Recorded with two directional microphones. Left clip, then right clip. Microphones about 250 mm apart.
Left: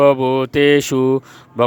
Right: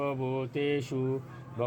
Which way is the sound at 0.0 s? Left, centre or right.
Left.